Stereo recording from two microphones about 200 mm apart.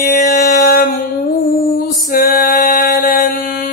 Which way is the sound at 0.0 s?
45° left (ahead or behind).